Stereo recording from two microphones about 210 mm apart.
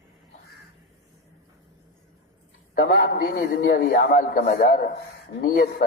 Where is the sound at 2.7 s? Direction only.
50° left (ahead or behind).